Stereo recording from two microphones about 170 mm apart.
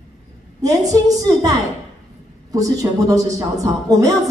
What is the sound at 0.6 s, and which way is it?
A woman's voice, 20° right (ahead or behind).